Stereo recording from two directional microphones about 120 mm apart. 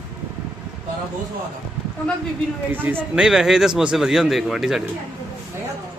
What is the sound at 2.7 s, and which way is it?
Speech, 15° right (ahead or behind).